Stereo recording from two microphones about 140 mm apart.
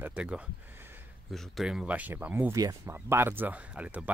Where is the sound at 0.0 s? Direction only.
10° right (ahead or behind).